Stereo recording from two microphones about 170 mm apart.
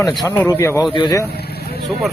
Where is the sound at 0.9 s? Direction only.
30° left (ahead or behind).